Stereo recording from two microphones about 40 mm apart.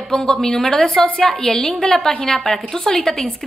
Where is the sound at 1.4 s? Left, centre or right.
Centre.